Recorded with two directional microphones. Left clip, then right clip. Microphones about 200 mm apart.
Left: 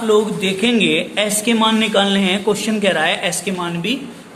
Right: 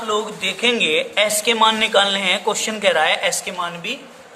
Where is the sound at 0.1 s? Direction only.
10° right (ahead or behind).